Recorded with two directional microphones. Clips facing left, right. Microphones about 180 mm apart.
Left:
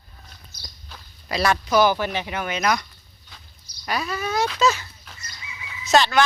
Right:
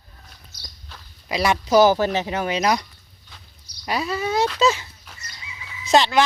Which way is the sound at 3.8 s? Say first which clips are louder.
Right 2 dB; 25° right (ahead or behind).